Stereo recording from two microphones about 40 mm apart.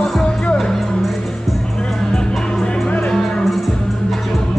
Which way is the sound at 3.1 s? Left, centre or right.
Centre.